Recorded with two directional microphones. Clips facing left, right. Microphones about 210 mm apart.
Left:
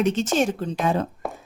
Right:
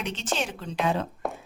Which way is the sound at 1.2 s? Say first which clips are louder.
Even; centre (ahead or behind).